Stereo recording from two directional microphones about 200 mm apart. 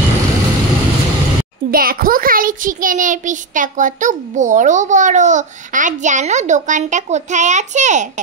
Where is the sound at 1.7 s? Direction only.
45° right (ahead or behind).